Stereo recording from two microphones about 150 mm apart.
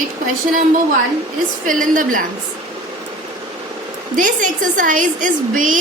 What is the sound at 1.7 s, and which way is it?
Speech, 65° right (ahead or behind).